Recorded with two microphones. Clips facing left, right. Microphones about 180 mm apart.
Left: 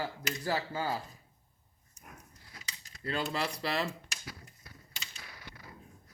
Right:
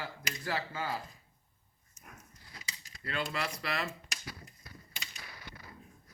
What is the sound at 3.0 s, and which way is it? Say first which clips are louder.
Speech: left 3 dB; 30° left (ahead or behind).